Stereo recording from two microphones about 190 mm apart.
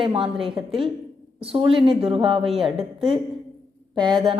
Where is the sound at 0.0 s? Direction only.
25° right (ahead or behind).